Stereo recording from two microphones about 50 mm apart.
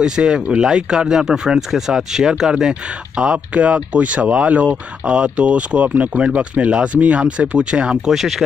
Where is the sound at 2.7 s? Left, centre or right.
Right.